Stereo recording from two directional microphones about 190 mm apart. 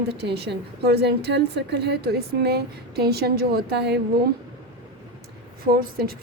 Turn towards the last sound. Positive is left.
turn(degrees=-55)  # may be behind; listen again after turning